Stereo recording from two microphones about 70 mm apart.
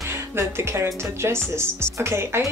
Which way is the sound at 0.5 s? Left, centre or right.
Right.